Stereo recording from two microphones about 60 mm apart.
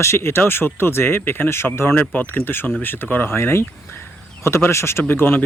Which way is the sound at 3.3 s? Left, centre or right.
Left.